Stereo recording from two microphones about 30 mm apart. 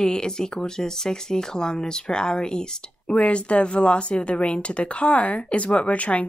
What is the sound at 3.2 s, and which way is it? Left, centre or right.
A woman's voice, left.